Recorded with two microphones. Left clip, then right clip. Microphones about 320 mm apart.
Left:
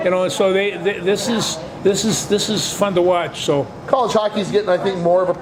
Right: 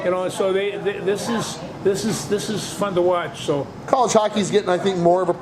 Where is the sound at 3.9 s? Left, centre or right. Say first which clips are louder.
Left 1 dB; right.